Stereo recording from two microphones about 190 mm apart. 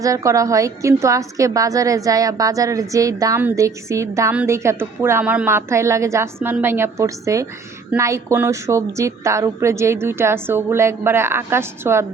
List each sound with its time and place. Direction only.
0.0 s a woman's voice: 15° right (ahead or behind)